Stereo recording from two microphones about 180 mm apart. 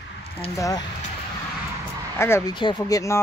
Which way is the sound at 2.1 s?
15° left (ahead or behind).